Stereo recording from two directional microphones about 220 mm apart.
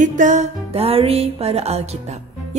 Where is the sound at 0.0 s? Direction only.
35° right (ahead or behind).